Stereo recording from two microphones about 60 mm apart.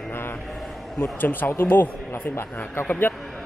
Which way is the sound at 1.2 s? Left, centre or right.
Left.